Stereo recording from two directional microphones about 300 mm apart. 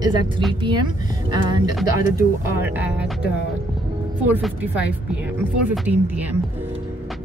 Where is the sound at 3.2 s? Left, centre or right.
Left.